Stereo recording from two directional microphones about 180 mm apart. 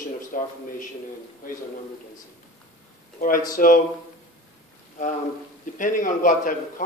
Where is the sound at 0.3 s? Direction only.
45° left (ahead or behind).